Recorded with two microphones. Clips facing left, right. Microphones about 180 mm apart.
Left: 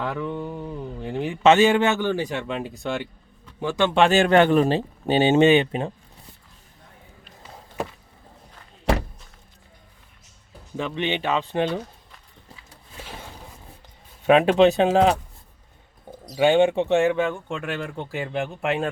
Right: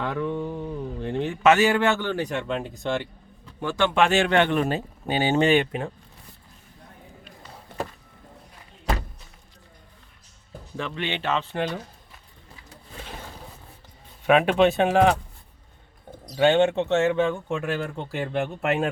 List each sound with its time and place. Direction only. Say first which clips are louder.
0.0 s speech: right 1 dB; centre (ahead or behind)
1.4 s a man's voice: left 3 dB; 25° left (ahead or behind); by 2.7 s 5° left (ahead or behind)
3.6 s a man's voice: left 2 dB; 15° left (ahead or behind)
3.9 s speech: left 4 dB; 35° left (ahead or behind)
10.8 s a man's voice: left 4 dB; 20° left (ahead or behind)
14.3 s speech: left 3 dB; 30° left (ahead or behind)
16.3 s speech: left 1 dB; 10° left (ahead or behind)